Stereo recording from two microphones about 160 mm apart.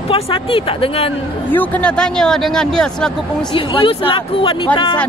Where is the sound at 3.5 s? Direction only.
30° left (ahead or behind).